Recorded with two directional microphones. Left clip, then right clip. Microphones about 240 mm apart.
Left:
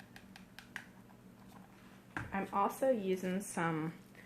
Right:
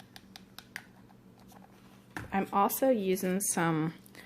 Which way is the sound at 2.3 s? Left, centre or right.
Right.